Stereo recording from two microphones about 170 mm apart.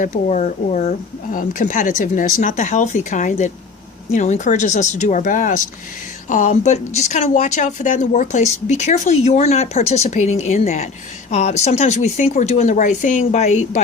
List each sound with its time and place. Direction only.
0.0 s speech: 45° left (ahead or behind)